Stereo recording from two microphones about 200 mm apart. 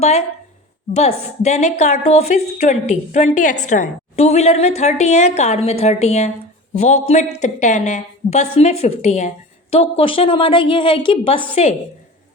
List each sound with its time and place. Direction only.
0.0 s a woman's voice: 30° left (ahead or behind)